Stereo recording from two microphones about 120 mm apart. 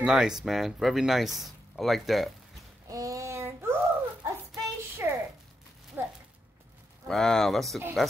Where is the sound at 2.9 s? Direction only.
30° right (ahead or behind).